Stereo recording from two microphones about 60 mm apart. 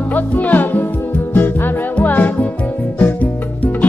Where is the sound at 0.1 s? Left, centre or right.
Left.